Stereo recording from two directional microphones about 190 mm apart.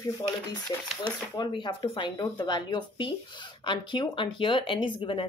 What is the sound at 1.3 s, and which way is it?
Speech, 25° left (ahead or behind).